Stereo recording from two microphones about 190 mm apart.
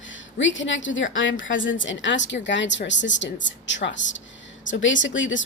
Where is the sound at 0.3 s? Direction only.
75° left (ahead or behind).